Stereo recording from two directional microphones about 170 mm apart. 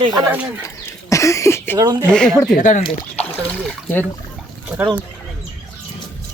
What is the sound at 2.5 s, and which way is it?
Speech, 50° left (ahead or behind).